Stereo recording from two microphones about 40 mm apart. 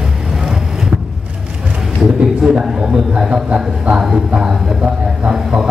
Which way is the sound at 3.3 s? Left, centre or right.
Right.